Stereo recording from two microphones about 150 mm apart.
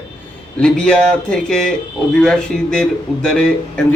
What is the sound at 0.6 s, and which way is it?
A man's voice, 5° left (ahead or behind).